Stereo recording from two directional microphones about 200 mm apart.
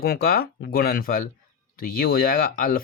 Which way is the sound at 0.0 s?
50° left (ahead or behind).